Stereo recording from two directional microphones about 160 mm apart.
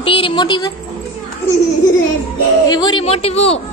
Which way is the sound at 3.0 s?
40° left (ahead or behind).